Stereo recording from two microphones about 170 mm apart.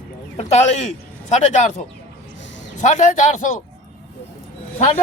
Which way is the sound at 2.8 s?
45° left (ahead or behind).